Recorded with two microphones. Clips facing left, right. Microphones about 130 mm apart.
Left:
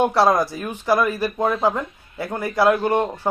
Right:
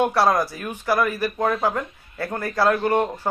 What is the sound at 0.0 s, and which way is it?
Speech, 15° left (ahead or behind).